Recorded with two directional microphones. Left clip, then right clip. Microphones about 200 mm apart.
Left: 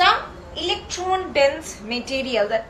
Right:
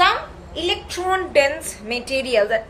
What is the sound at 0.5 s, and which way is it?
A woman's voice, 55° right (ahead or behind).